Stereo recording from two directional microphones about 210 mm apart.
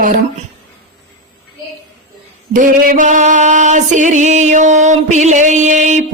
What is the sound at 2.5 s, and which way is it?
Music, 40° right (ahead or behind).